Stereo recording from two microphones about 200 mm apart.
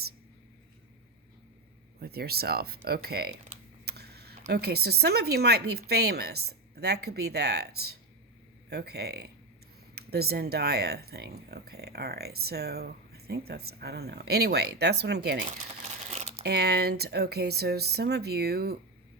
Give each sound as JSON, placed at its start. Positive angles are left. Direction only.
{"t": 2.0, "sound": "speech", "side_deg": -50}
{"t": 15.4, "sound": "crumpling", "side_deg": -30}
{"t": 16.4, "sound": "speech", "side_deg": -55}